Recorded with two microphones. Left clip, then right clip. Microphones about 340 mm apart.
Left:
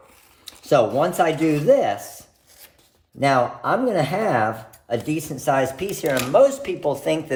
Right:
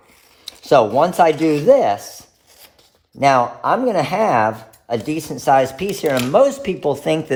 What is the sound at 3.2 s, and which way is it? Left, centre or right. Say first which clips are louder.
Speech: right 5 dB; centre.